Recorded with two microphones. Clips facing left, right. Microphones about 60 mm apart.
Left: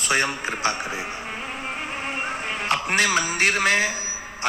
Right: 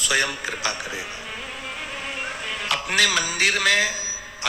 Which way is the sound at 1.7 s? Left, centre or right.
Left.